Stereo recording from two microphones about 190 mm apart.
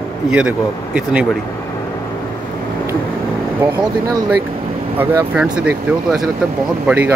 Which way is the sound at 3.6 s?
20° right (ahead or behind).